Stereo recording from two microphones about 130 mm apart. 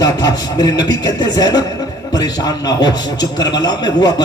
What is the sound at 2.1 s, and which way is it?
A man's voice, 30° left (ahead or behind).